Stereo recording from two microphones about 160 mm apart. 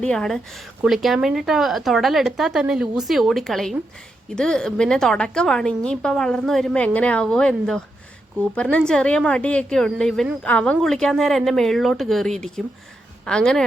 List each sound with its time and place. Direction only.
0.0 s a woman's voice: 5° left (ahead or behind)